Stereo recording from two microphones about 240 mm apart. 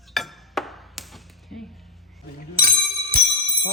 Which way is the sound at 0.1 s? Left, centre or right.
Centre.